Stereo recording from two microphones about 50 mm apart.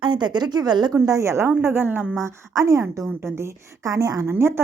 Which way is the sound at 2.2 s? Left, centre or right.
Right.